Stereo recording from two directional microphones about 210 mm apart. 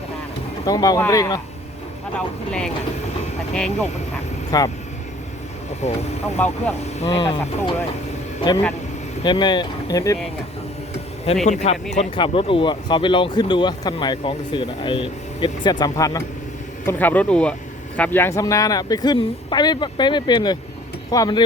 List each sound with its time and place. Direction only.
0.6 s speech: 20° left (ahead or behind)
2.1 s speech: 5° left (ahead or behind)
4.5 s speech: 15° left (ahead or behind)
5.8 s speech: 30° left (ahead or behind)
6.3 s speech: 10° left (ahead or behind)
9.2 s speech: 20° left (ahead or behind)
11.4 s speech: 35° left (ahead or behind)